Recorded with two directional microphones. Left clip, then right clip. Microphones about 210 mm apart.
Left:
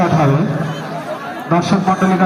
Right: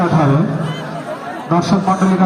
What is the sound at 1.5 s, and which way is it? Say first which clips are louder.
Speech: even; 55° right (ahead or behind).